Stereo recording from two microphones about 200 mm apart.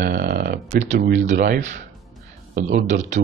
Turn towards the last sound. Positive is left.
turn(degrees=-35)  # may be behind; listen again after turning